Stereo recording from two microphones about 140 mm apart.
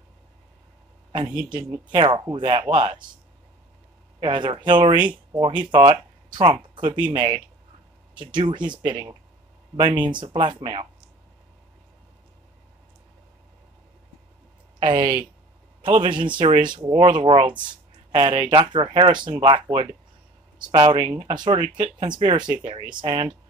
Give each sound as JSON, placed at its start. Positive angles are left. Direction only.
{"t": 1.5, "sound": "speech", "side_deg": -35}
{"t": 4.2, "sound": "speech", "side_deg": -35}
{"t": 14.8, "sound": "speech", "side_deg": -35}